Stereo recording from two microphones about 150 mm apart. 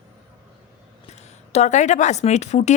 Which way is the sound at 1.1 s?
50° left (ahead or behind).